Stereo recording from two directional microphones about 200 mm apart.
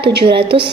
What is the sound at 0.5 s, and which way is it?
Speech, 25° right (ahead or behind).